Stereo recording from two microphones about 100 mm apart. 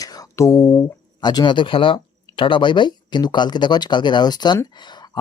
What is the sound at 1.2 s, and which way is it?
Speech, 45° left (ahead or behind).